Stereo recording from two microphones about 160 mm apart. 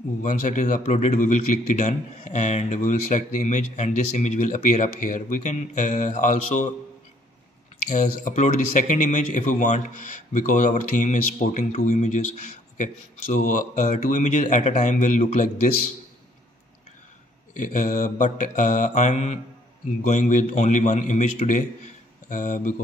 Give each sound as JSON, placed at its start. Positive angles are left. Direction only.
{"t": 0.2, "sound": "speech", "side_deg": 55}
{"t": 7.9, "sound": "speech", "side_deg": 50}
{"t": 17.6, "sound": "speech", "side_deg": 55}